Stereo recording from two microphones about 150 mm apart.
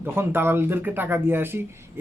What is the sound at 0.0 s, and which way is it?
Speech, 15° right (ahead or behind).